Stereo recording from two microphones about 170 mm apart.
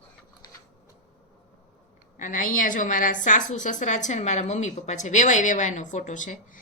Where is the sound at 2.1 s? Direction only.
50° left (ahead or behind).